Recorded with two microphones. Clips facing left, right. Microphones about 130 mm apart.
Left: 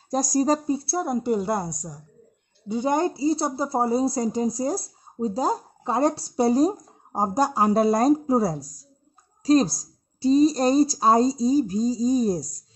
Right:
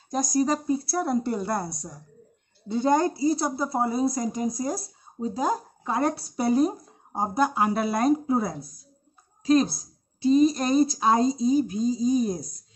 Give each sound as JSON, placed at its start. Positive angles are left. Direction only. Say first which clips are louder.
{"t": 0.1, "sound": "a woman's voice", "louder": "left 3 dB", "side_deg": 40}